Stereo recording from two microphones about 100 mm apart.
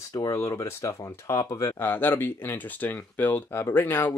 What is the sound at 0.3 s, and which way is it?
Speech, 30° left (ahead or behind).